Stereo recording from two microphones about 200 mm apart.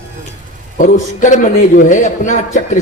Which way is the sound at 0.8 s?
40° left (ahead or behind).